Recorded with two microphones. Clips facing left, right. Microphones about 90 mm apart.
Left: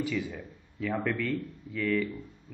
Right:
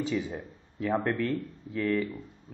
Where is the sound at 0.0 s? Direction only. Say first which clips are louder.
Right 1 dB; 25° right (ahead or behind).